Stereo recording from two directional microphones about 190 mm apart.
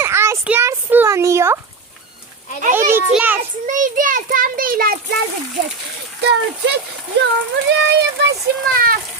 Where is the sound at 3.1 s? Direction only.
10° right (ahead or behind).